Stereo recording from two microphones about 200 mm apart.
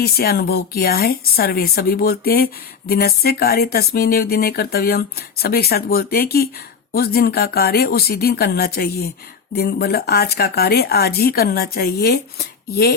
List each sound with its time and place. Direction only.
0.0 s speech: 50° left (ahead or behind)